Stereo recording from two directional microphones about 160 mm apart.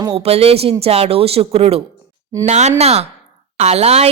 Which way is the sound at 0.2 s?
40° right (ahead or behind).